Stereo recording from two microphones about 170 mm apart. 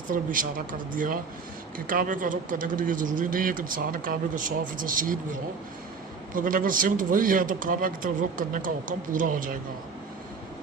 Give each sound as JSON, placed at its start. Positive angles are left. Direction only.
{"t": 0.1, "sound": "speech", "side_deg": -55}